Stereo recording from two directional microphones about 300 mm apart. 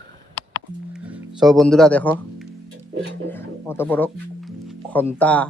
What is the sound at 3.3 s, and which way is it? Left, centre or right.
Speech, centre.